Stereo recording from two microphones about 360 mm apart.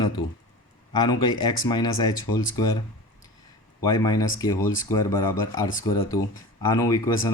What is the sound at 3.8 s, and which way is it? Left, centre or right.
Speech, centre.